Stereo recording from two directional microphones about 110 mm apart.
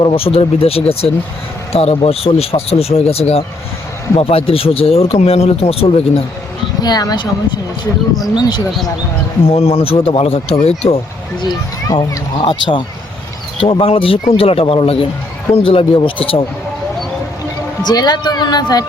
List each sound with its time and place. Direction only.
0.0 s speech: 55° left (ahead or behind)
6.8 s a man's voice: 35° left (ahead or behind)
8.4 s a man's voice: 40° left (ahead or behind)
9.5 s speech: 65° left (ahead or behind)
11.4 s a man's voice: 40° left (ahead or behind)
12.4 s speech: 50° left (ahead or behind)
17.8 s a man's voice: 40° left (ahead or behind)